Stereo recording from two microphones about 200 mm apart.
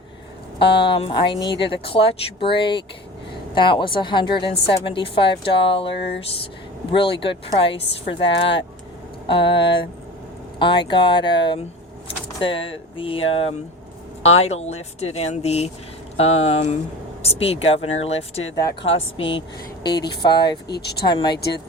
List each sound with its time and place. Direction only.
0.6 s a woman's voice: 25° left (ahead or behind)
20.7 s speech: 55° left (ahead or behind)
21.0 s a woman's voice: 20° left (ahead or behind)
21.3 s speech: 55° left (ahead or behind)